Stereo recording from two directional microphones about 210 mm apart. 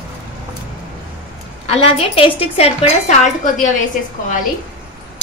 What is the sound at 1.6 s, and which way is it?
A woman's voice, 30° left (ahead or behind).